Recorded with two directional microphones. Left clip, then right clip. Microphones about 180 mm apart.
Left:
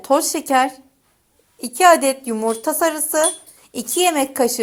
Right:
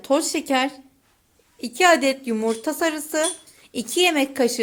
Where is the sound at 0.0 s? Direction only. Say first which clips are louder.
Left 4 dB; 20° right (ahead or behind).